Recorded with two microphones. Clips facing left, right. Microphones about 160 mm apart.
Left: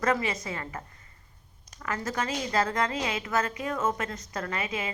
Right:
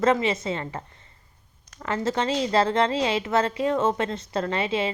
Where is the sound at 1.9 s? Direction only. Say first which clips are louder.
Right 6 dB; 25° right (ahead or behind).